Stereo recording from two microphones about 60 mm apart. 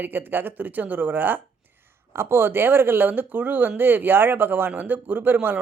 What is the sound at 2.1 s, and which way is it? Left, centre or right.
Speech, right.